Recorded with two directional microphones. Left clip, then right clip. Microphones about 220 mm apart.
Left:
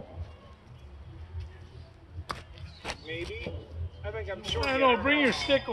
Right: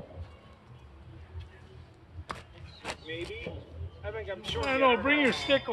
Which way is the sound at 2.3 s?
10° right (ahead or behind).